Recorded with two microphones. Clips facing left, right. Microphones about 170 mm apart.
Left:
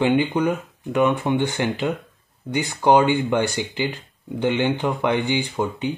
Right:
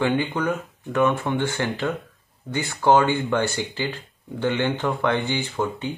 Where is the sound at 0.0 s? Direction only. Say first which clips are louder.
Left 4 dB; 15° left (ahead or behind).